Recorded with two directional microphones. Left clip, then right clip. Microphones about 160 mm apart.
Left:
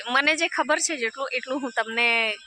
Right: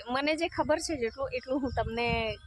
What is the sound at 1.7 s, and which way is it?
Speech, centre (ahead or behind).